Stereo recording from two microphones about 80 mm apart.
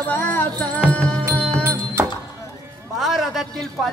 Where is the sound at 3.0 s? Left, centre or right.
Centre.